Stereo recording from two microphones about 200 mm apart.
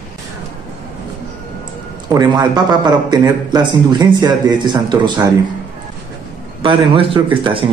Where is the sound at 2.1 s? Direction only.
20° right (ahead or behind).